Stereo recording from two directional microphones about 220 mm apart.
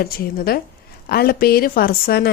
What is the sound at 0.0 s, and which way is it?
A woman's voice, 45° left (ahead or behind).